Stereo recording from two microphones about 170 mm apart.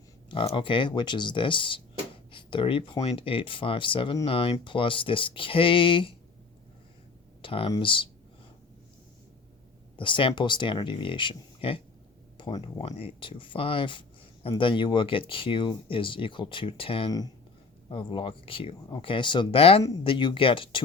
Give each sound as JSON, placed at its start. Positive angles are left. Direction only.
{"t": 0.3, "sound": "speech", "side_deg": 30}
{"t": 7.4, "sound": "speech", "side_deg": 30}
{"t": 10.0, "sound": "speech", "side_deg": 30}